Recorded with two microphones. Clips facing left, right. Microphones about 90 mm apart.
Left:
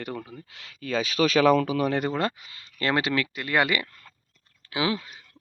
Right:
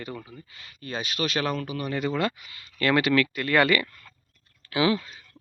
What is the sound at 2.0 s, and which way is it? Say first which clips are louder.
Speech: even; 40° left (ahead or behind).